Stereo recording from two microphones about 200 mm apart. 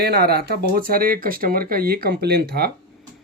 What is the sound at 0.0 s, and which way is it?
Speech, 50° right (ahead or behind).